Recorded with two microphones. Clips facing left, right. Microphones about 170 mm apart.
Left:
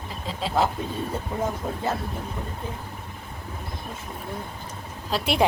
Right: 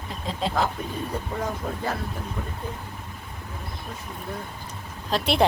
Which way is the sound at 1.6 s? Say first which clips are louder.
Left 1 dB; 10° left (ahead or behind).